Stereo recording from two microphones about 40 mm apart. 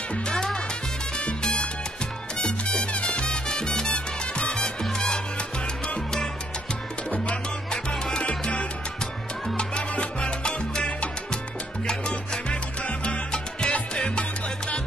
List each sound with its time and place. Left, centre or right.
0.3 s music: centre
2.3 s salsa music: left
4.9 s music: centre
7.9 s salsa music: centre
8.2 s salsa music: left
11.8 s salsa music: centre